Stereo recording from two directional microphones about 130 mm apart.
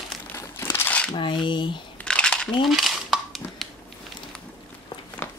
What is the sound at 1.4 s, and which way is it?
Speech, 40° left (ahead or behind).